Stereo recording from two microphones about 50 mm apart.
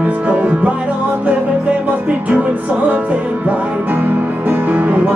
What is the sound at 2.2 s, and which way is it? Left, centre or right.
Music, right.